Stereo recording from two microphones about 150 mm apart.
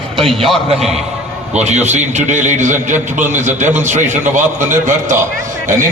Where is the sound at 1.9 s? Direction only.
50° right (ahead or behind).